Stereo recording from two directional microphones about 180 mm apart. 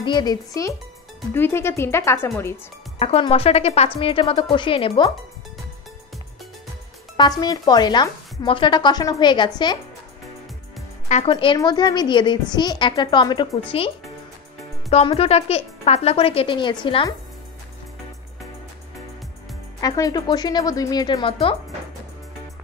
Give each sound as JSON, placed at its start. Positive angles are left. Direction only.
{"t": 0.0, "sound": "a woman's voice", "side_deg": 25}
{"t": 3.0, "sound": "speech", "side_deg": 35}
{"t": 7.2, "sound": "a woman's voice", "side_deg": 20}
{"t": 11.2, "sound": "a woman's voice", "side_deg": 30}
{"t": 19.8, "sound": "a woman's voice", "side_deg": 20}